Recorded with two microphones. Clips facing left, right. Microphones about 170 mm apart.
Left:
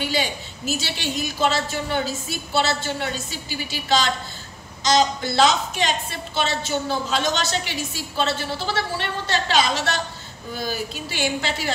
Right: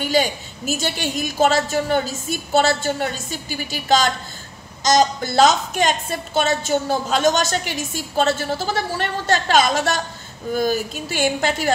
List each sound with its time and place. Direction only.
0.0 s a woman's voice: 45° right (ahead or behind)